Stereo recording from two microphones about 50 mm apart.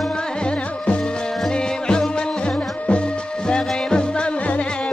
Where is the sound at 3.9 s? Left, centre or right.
Centre.